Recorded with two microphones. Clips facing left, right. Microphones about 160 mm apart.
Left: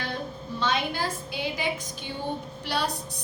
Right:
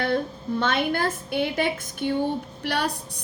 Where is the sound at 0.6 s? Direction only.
55° right (ahead or behind).